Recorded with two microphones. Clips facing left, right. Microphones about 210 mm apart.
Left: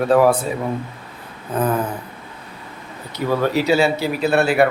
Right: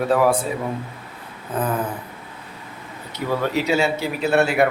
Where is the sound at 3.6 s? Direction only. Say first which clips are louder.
Left 4 dB; 35° left (ahead or behind).